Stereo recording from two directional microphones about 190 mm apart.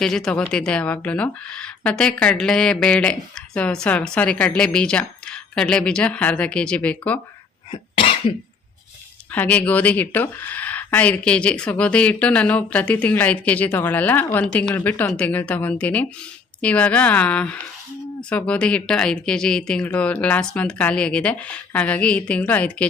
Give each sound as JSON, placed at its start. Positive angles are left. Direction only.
{"t": 0.0, "sound": "speech", "side_deg": 0}
{"t": 7.7, "sound": "cough", "side_deg": 30}
{"t": 9.3, "sound": "speech", "side_deg": 10}